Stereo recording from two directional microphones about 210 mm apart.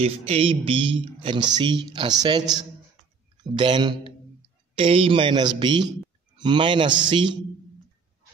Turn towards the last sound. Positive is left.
turn(degrees=-20)  # may be behind; listen again after turning